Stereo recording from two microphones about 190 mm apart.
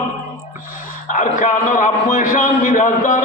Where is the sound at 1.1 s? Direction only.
45° left (ahead or behind).